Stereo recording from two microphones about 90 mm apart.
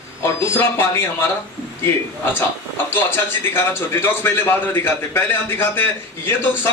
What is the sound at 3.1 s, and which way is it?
A man's voice, 25° left (ahead or behind).